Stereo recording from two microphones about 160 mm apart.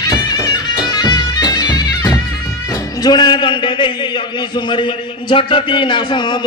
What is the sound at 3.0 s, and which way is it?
A man's voice, 25° left (ahead or behind).